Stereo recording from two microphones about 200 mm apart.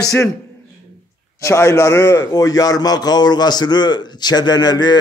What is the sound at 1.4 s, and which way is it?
A man's voice, 15° left (ahead or behind).